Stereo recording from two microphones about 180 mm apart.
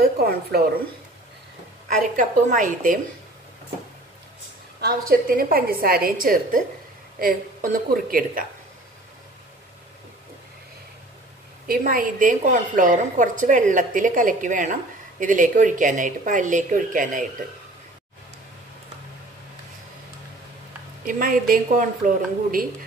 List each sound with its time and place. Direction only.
0.0 s a woman's voice: 60° right (ahead or behind)
2.1 s a woman's voice: 50° right (ahead or behind)
4.7 s a woman's voice: 60° right (ahead or behind)
11.6 s a woman's voice: 55° right (ahead or behind)
21.0 s a woman's voice: 50° right (ahead or behind)